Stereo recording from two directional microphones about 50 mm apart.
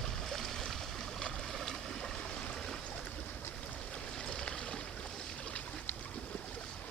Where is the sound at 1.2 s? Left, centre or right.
Centre.